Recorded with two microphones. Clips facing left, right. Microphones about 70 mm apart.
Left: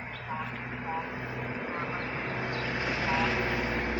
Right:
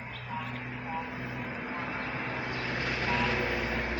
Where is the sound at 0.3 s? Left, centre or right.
Left.